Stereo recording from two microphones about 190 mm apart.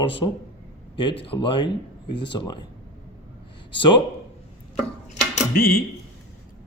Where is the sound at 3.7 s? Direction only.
25° left (ahead or behind).